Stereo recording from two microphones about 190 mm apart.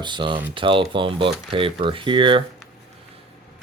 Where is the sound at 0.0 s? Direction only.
25° right (ahead or behind).